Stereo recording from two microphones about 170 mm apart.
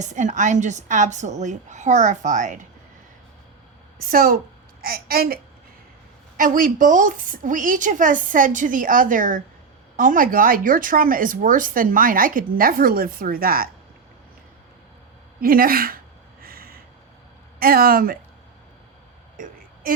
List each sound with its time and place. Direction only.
0.0 s a woman's voice: 45° right (ahead or behind)
4.1 s a woman's voice: 55° right (ahead or behind)
15.4 s speech: 60° right (ahead or behind)
16.4 s a sound: 60° right (ahead or behind)
17.6 s speech: 60° right (ahead or behind)